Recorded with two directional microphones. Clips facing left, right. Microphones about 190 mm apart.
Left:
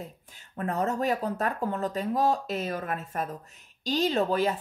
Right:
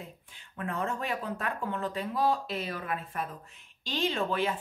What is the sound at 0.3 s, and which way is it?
Speech, 40° left (ahead or behind).